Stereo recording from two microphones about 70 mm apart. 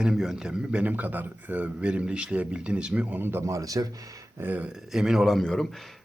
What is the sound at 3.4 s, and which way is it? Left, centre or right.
Speech, right.